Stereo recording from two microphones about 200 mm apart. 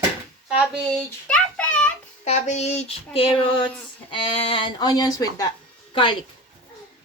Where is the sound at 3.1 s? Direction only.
25° left (ahead or behind).